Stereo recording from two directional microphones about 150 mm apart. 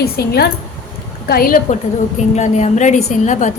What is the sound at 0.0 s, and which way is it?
Speech, 90° left.